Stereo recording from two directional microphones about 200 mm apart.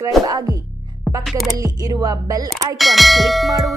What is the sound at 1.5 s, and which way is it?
Speech, 15° right (ahead or behind).